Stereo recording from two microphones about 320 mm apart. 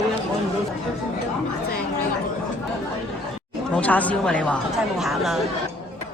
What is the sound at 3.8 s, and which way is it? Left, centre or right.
A woman's voice, centre.